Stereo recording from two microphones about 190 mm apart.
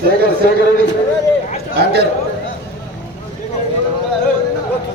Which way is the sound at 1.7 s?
60° right (ahead or behind).